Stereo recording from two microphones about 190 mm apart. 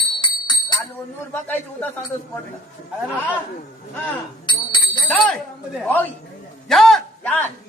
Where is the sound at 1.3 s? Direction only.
10° left (ahead or behind).